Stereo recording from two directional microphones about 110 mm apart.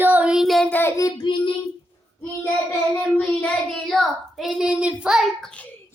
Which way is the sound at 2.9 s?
15° left (ahead or behind).